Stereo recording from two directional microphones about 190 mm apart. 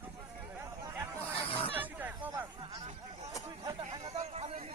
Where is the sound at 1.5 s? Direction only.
30° left (ahead or behind).